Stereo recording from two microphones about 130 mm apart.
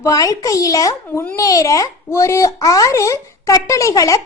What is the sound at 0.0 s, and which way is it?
A child's voice, 25° left (ahead or behind).